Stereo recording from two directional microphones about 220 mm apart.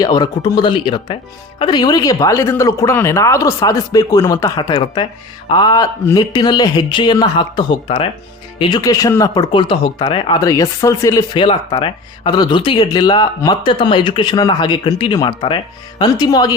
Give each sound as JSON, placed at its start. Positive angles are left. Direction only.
{"t": 0.0, "sound": "speech", "side_deg": 20}